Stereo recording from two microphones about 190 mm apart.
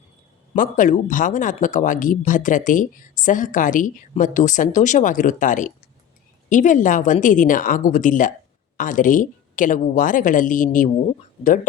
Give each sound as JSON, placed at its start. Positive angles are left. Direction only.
{"t": 0.5, "sound": "speech", "side_deg": 45}